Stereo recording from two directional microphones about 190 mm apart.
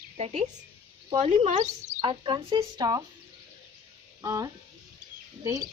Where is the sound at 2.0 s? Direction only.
25° right (ahead or behind).